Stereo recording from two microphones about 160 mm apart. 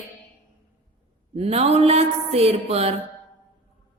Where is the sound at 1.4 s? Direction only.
40° right (ahead or behind).